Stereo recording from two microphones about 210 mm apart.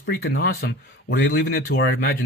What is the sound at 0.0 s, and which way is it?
Speech, 45° left (ahead or behind).